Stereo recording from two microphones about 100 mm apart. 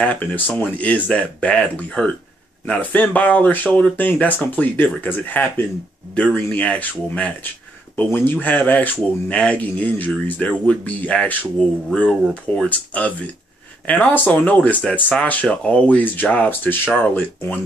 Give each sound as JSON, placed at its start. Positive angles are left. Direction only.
{"t": 0.0, "sound": "speech", "side_deg": 15}